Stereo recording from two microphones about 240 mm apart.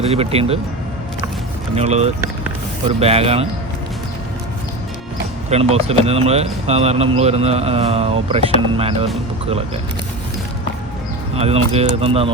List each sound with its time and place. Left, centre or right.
0.0 s speech: right
1.7 s speech: right
5.5 s speech: right
11.3 s speech: right